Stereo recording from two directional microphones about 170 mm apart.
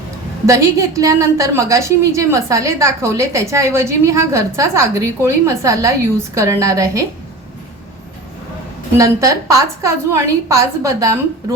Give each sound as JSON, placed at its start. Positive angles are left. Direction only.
{"t": 0.4, "sound": "a woman's voice", "side_deg": -20}
{"t": 9.0, "sound": "a woman's voice", "side_deg": -20}